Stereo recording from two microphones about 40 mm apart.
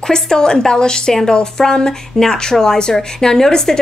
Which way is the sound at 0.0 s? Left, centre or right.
Centre.